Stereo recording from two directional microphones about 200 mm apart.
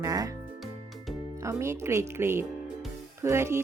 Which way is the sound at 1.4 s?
15° right (ahead or behind).